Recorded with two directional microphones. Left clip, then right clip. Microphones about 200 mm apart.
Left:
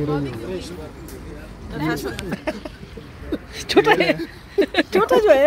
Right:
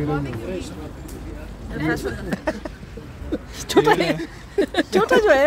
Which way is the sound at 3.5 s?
5° right (ahead or behind).